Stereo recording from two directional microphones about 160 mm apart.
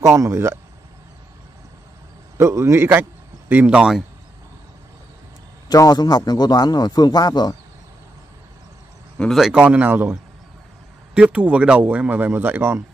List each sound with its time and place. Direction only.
0.0 s speech: 20° right (ahead or behind)
2.3 s a man's voice: 20° right (ahead or behind)
5.7 s a man's voice: 25° left (ahead or behind)
9.2 s a man's voice: centre (ahead or behind)
11.1 s a man's voice: 5° right (ahead or behind)